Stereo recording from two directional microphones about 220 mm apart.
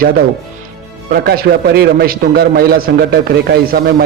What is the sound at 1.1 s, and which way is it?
A man's voice, 45° right (ahead or behind).